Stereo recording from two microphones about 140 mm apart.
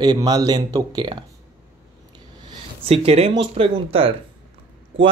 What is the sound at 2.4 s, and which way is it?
Speech, 45° right (ahead or behind).